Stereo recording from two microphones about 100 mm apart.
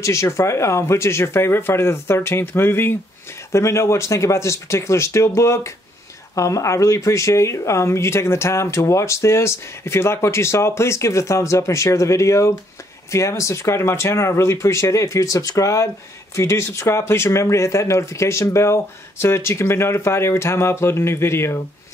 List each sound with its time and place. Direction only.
0.0 s speech: 30° left (ahead or behind)